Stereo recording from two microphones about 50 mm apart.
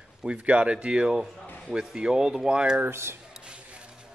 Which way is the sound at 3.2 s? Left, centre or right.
Centre.